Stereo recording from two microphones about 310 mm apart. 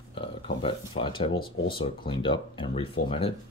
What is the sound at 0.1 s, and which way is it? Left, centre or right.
Speech, centre.